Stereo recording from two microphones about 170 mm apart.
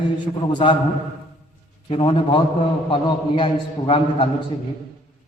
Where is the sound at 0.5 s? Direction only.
30° left (ahead or behind).